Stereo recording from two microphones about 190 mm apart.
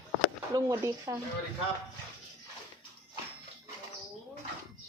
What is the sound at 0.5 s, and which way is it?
Speech, 15° right (ahead or behind).